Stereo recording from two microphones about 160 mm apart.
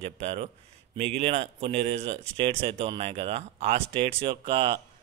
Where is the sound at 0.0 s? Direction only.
40° right (ahead or behind).